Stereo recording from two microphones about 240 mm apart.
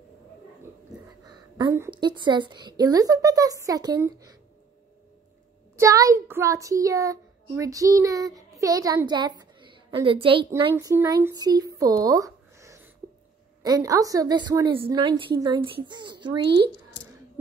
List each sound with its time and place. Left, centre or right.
1.6 s a woman's voice: centre
5.8 s a child's voice: centre